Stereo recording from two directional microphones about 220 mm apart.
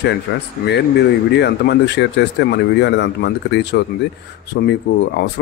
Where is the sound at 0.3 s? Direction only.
50° left (ahead or behind).